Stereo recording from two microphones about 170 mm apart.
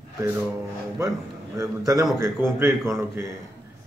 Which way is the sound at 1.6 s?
20° right (ahead or behind).